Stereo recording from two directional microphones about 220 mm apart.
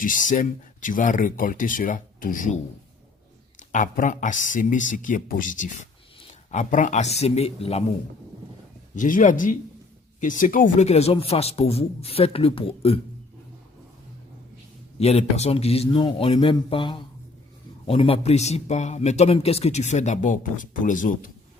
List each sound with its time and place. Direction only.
0.0 s a man's voice: 35° left (ahead or behind)
3.6 s a man's voice: 35° left (ahead or behind)
6.1 s a sound: 30° left (ahead or behind)
7.2 s a man's voice: 30° left (ahead or behind)
9.0 s a man's voice: 35° left (ahead or behind)
14.9 s a man's voice: 30° left (ahead or behind)